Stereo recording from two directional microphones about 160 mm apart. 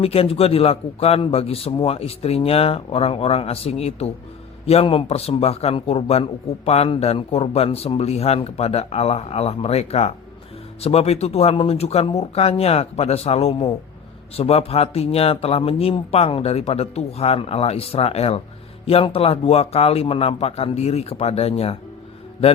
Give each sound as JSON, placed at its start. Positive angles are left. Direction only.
{"t": 0.0, "sound": "a man's voice", "side_deg": 35}